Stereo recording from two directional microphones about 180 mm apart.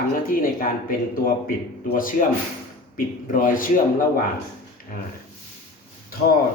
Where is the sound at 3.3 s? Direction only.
50° left (ahead or behind).